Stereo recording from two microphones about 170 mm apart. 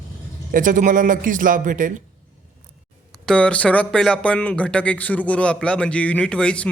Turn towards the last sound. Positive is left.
turn(degrees=5)  # may be behind; listen again after turning